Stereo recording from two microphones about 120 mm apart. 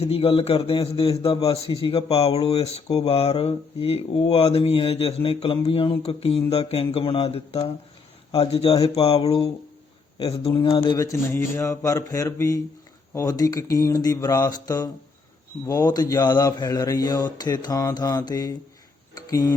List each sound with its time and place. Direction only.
0.0 s a man's voice: 55° left (ahead or behind)
10.9 s speech: 25° left (ahead or behind)